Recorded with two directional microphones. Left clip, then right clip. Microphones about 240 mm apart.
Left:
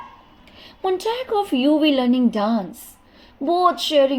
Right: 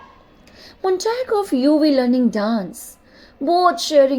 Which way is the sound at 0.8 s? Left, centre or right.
Centre.